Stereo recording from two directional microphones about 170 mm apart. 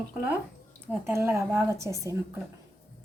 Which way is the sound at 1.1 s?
15° right (ahead or behind).